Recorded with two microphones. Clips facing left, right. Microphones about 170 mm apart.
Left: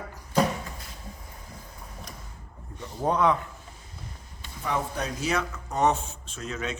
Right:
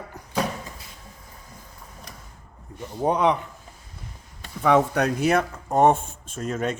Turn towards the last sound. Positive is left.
turn(degrees=-50)  # may be behind; listen again after turning